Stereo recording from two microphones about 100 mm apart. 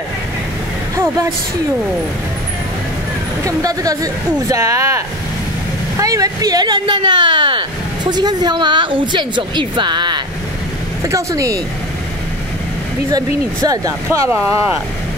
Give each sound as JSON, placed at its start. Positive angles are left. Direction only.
{"t": 0.9, "sound": "speech", "side_deg": -30}
{"t": 3.4, "sound": "speech", "side_deg": -35}
{"t": 11.1, "sound": "speech", "side_deg": -30}
{"t": 13.1, "sound": "speech", "side_deg": -40}